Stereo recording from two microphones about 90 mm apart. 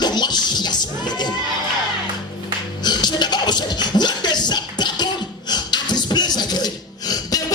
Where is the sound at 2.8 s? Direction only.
50° left (ahead or behind).